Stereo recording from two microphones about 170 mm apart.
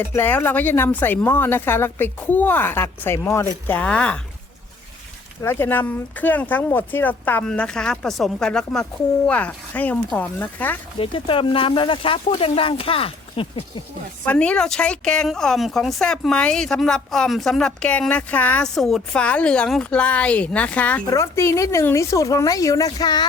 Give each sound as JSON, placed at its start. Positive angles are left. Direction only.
{"t": 0.1, "sound": "speech", "side_deg": 10}
{"t": 5.4, "sound": "speech", "side_deg": 15}
{"t": 11.0, "sound": "speech", "side_deg": 30}
{"t": 14.3, "sound": "a woman's voice", "side_deg": 5}